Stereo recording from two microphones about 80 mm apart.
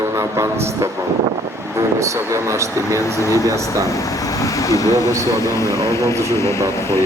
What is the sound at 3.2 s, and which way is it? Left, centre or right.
Speech, left.